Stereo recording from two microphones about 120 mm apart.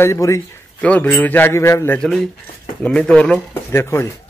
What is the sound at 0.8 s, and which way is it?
A man's voice, 10° left (ahead or behind).